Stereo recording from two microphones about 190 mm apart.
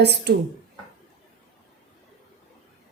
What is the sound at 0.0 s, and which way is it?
Speech, 60° right (ahead or behind).